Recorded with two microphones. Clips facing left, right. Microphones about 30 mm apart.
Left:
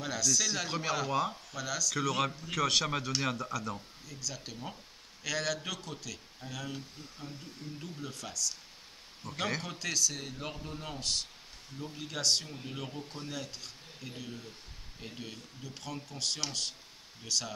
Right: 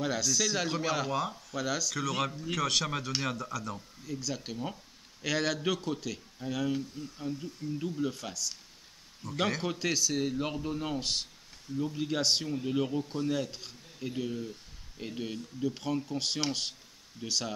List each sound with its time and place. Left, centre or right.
0.0 s a man's voice: centre
0.7 s speech: centre
1.5 s a man's voice: centre
2.0 s speech: centre
4.1 s a man's voice: centre
9.2 s speech: centre
9.6 s a man's voice: centre